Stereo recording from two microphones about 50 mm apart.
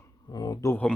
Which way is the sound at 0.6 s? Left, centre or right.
Left.